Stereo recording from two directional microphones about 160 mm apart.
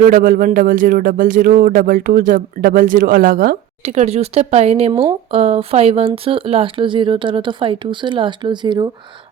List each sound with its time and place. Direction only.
0.0 s speech: 55° right (ahead or behind)
3.8 s speech: 40° right (ahead or behind)